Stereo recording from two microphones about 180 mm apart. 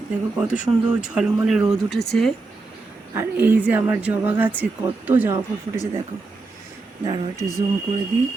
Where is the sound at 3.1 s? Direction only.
10° right (ahead or behind).